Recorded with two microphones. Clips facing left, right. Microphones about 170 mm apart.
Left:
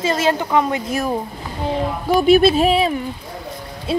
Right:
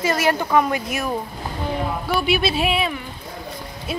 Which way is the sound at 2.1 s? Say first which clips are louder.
Left 10 dB; 45° left (ahead or behind).